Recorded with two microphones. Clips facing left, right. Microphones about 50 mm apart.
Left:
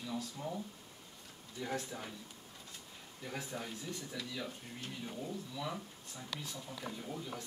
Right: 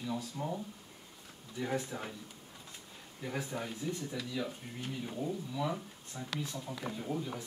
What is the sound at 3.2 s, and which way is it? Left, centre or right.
Speech, centre.